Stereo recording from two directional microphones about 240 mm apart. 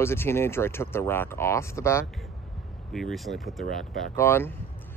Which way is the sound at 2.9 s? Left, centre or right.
Centre.